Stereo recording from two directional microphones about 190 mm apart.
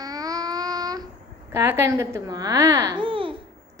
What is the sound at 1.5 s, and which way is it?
A child's voice, 15° right (ahead or behind).